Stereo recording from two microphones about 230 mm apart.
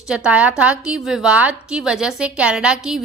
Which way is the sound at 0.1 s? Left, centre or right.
Centre.